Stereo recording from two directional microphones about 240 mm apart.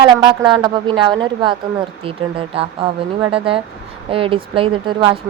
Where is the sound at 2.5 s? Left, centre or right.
Right.